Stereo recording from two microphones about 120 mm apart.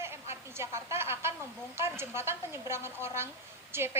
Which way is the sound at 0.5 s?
25° right (ahead or behind).